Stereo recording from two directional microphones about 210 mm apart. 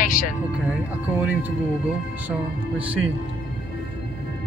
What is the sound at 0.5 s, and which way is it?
Speech, 5° right (ahead or behind).